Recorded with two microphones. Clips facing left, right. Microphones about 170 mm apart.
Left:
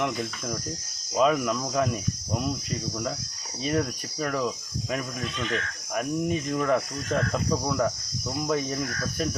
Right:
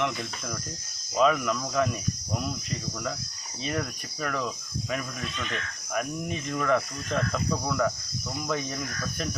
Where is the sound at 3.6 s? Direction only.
35° left (ahead or behind).